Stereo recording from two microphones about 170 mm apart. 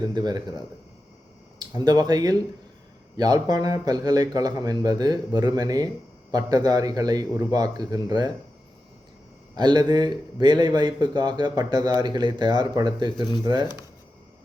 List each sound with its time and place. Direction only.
0.0 s speech: 25° right (ahead or behind)
9.6 s speech: 25° right (ahead or behind)